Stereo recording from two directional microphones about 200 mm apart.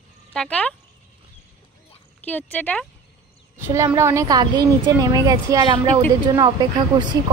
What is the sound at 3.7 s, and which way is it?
Speech, 15° right (ahead or behind).